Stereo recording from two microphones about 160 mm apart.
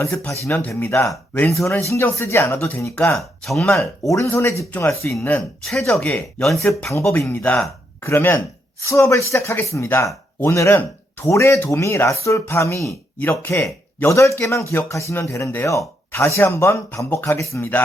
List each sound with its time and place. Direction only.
0.0 s speech: 15° left (ahead or behind); by 3.7 s centre (ahead or behind)
4.1 s speech: 15° left (ahead or behind)
5.4 s speech: centre (ahead or behind)
6.9 s speech: 15° left (ahead or behind)